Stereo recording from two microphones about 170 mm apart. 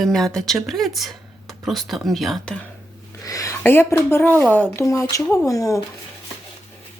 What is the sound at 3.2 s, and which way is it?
Speech, 20° left (ahead or behind).